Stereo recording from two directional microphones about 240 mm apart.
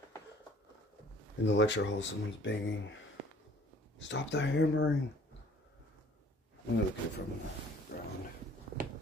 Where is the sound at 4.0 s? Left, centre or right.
Left.